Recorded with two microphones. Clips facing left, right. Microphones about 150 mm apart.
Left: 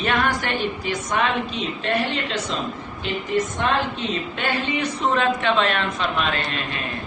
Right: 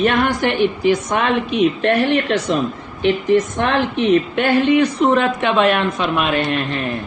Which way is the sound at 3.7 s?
65° right (ahead or behind).